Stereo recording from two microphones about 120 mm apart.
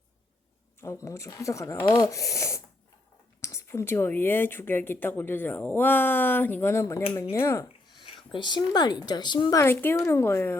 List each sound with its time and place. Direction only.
1.0 s a woman's voice: 25° left (ahead or behind)
7.9 s a woman's voice: 40° left (ahead or behind)
9.6 s a woman's voice: 20° left (ahead or behind)